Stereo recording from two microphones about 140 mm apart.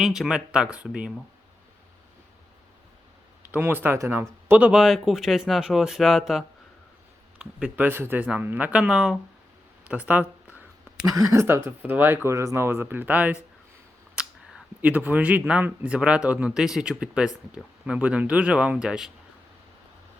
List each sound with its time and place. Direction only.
0.0 s speech: 5° right (ahead or behind)
3.5 s speech: 15° right (ahead or behind)
11.1 s speech: 20° right (ahead or behind)
14.2 s a sound: 5° right (ahead or behind)
14.8 s speech: 10° right (ahead or behind)